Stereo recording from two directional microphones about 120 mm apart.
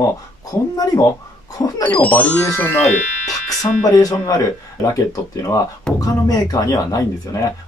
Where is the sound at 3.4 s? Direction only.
30° left (ahead or behind).